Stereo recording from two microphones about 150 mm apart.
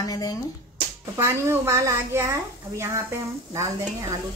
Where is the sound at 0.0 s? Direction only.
25° left (ahead or behind).